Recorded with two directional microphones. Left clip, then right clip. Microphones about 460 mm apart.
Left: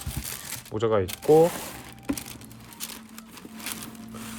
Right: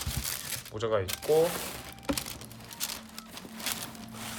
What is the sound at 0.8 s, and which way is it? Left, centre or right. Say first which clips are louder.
Speech: left 6 dB; centre.